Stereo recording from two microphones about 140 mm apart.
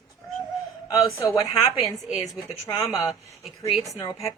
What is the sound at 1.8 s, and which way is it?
Speech, centre (ahead or behind).